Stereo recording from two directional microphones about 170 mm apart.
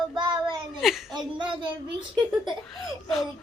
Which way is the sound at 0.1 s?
25° right (ahead or behind).